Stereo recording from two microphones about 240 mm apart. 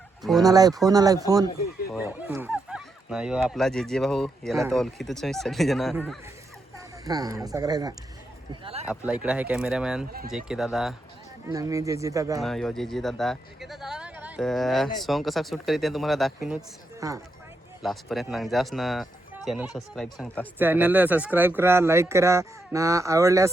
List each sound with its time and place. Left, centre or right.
0.2 s speech: centre
0.4 s speech: centre
1.9 s speech: centre
7.0 s speech: centre
8.6 s speech: right
8.9 s speech: centre
10.1 s speech: right
10.3 s speech: centre
11.4 s speech: centre
12.4 s speech: centre
17.0 s speech: centre
17.8 s speech: centre
20.6 s speech: centre